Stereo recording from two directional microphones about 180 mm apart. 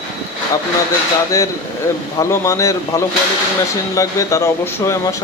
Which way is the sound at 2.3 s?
15° left (ahead or behind).